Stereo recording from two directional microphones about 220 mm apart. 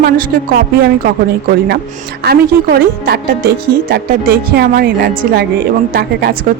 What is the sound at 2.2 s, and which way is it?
Speech, 45° right (ahead or behind).